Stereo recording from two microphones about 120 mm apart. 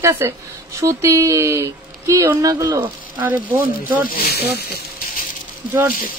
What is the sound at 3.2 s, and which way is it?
Speech, 15° right (ahead or behind).